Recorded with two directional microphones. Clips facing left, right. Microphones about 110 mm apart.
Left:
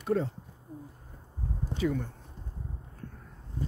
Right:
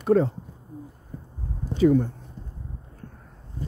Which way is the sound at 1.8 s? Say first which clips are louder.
Right 12 dB; 35° right (ahead or behind).